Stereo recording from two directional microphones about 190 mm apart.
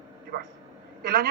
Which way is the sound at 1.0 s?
60° right (ahead or behind).